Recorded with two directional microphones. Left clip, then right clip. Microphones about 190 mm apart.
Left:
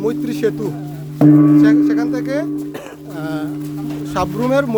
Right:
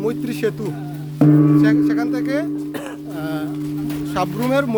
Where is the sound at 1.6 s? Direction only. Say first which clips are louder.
Left 4 dB; 10° left (ahead or behind).